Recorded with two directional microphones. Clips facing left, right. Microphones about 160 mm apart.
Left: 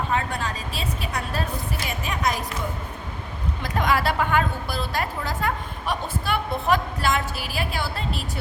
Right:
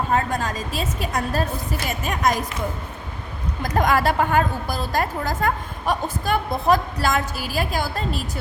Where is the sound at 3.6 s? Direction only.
45° right (ahead or behind).